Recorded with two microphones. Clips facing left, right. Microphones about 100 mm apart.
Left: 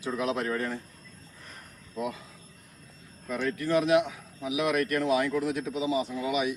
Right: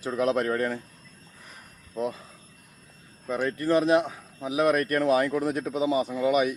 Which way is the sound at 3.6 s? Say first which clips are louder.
Right 2 dB; 40° right (ahead or behind).